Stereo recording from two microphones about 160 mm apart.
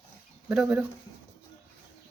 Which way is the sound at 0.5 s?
5° right (ahead or behind).